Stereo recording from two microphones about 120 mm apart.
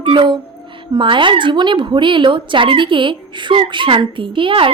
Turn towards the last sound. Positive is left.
turn(degrees=-45)  # may be behind; listen again after turning